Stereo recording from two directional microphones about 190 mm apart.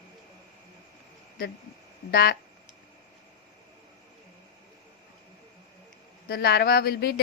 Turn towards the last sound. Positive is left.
turn(degrees=60)  # may be behind; listen again after turning